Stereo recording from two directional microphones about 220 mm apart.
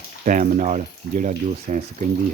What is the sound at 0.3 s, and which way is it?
Speech, 35° right (ahead or behind).